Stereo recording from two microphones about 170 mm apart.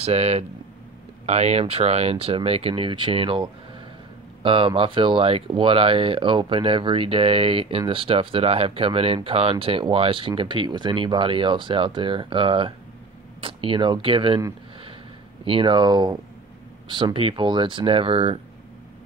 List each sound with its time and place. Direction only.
0.0 s speech: 40° right (ahead or behind)
15.4 s speech: 30° right (ahead or behind)